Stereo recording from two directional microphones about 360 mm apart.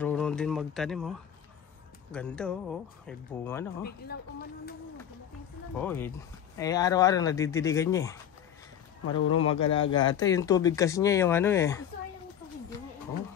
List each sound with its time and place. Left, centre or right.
0.0 s speech: centre
2.1 s speech: centre
5.8 s speech: centre
9.0 s speech: left
9.5 s speech: centre